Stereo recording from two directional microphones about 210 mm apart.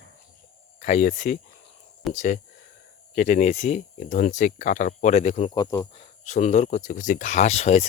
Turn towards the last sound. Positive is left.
turn(degrees=35)  # may be behind; listen again after turning